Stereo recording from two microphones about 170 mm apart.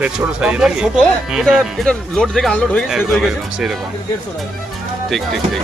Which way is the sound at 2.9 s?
5° right (ahead or behind).